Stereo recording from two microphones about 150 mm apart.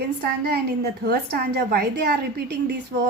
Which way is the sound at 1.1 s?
90° right.